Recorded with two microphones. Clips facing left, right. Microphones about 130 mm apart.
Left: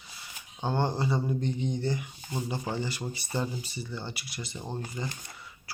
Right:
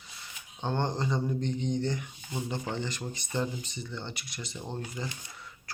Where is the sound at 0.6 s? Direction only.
5° left (ahead or behind).